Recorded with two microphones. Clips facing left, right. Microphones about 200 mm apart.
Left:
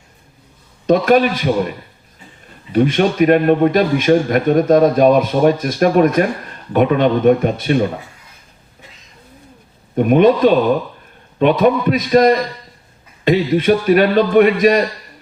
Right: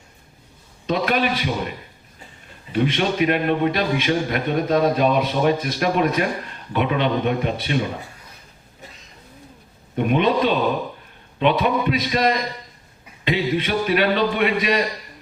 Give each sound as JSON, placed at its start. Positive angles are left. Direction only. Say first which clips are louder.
{"t": 0.9, "sound": "a man's voice", "louder": "left 9 dB", "side_deg": 45}
{"t": 2.7, "sound": "a man's voice", "louder": "left 6 dB", "side_deg": 45}
{"t": 9.9, "sound": "a man's voice", "louder": "left 8 dB", "side_deg": 45}